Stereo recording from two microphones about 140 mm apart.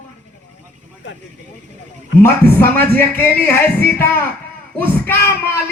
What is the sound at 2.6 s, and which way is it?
Speech, 15° left (ahead or behind).